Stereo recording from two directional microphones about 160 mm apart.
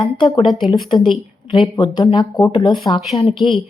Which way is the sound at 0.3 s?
30° left (ahead or behind).